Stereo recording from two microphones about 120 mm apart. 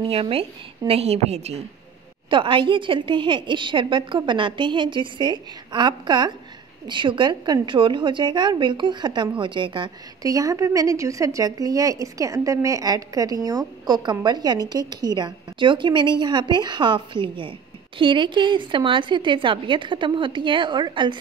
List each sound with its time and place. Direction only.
0.1 s a woman's voice: 55° right (ahead or behind)
2.2 s a woman's voice: 45° right (ahead or behind)